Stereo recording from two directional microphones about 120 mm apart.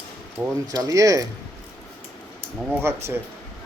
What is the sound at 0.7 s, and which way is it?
Speech, 30° right (ahead or behind).